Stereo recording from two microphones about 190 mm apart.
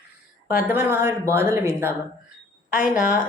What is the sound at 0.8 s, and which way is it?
Speech, 15° right (ahead or behind).